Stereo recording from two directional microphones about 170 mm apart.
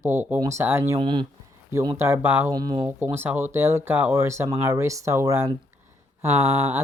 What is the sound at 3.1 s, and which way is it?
Speech, 10° right (ahead or behind).